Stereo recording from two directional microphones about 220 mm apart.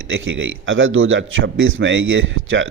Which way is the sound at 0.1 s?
60° right (ahead or behind).